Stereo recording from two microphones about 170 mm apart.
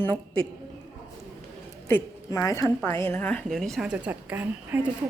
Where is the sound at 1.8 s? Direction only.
15° left (ahead or behind).